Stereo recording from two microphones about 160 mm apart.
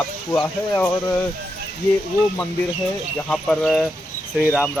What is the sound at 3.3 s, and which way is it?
Speech, 5° left (ahead or behind).